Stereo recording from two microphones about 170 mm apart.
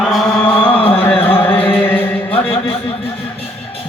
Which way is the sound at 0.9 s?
10° left (ahead or behind).